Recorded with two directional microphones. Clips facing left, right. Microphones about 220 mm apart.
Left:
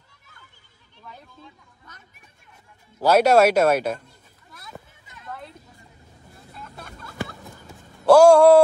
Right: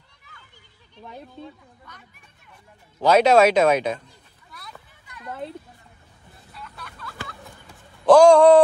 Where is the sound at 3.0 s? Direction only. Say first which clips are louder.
Even; 10° left (ahead or behind).